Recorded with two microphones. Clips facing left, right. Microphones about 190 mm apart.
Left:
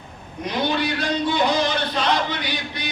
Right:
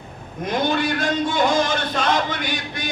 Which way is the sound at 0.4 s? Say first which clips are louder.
Right 2 dB; 50° right (ahead or behind).